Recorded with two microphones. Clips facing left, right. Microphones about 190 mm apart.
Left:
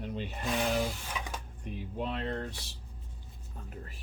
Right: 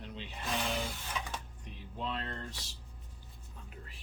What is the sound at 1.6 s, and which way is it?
Speech, 55° left (ahead or behind).